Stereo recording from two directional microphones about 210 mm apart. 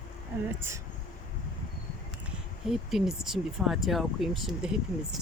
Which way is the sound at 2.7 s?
Centre (ahead or behind).